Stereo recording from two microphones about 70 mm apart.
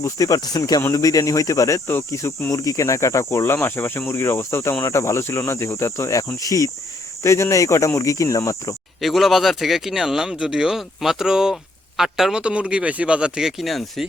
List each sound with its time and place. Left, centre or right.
0.0 s speech: left
7.2 s speech: left
9.0 s speech: centre